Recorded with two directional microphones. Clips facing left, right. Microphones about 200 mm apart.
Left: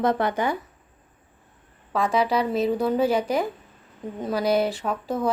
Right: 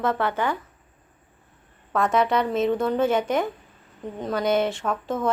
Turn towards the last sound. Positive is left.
turn(degrees=0)  # may be behind; listen again after turning